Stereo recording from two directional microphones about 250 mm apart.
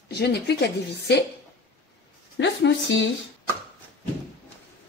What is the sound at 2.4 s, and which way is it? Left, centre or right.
Speech, left.